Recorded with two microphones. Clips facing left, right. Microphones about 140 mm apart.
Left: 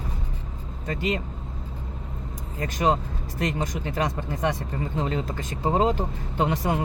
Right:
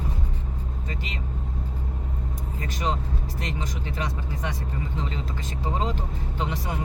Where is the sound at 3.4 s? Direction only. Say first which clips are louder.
Left 8 dB; 45° left (ahead or behind).